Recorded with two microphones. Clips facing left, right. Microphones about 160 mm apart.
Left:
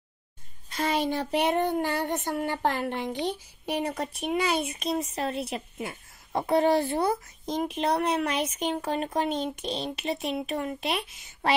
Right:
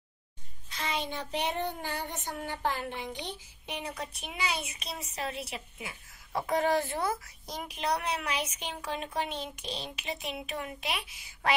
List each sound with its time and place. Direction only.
0.7 s child singing: 55° left (ahead or behind)
5.5 s a woman's voice: 40° left (ahead or behind)
6.7 s speech: 20° left (ahead or behind)
8.2 s speech: 40° left (ahead or behind)
10.5 s speech: 35° left (ahead or behind)